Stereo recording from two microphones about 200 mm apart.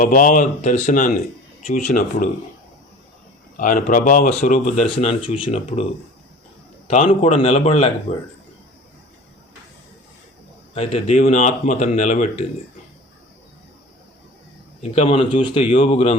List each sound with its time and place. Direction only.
0.0 s speech: 40° left (ahead or behind)
3.6 s speech: 45° left (ahead or behind)
7.1 s speech: 35° left (ahead or behind)
10.8 s speech: 35° left (ahead or behind)
14.8 s speech: 30° left (ahead or behind)